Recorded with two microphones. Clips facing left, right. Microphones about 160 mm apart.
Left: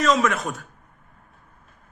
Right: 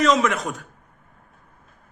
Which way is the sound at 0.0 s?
20° right (ahead or behind).